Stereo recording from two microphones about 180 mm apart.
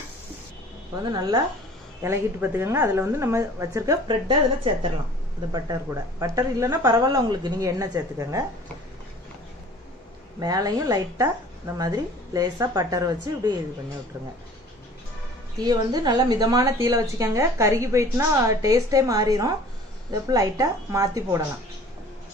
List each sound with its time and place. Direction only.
2.0 s a woman's voice: 15° right (ahead or behind)
10.4 s a woman's voice: 20° right (ahead or behind)
15.6 s a woman's voice: 20° right (ahead or behind)